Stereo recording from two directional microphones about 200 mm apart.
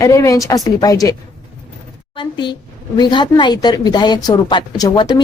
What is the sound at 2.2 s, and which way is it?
A woman's voice, 25° left (ahead or behind).